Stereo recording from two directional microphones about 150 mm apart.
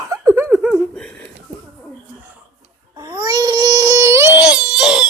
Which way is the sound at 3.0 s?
25° right (ahead or behind).